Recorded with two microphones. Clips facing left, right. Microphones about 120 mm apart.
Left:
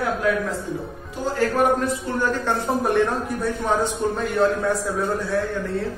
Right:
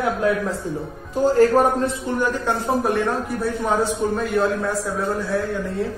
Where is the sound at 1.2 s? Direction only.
40° right (ahead or behind).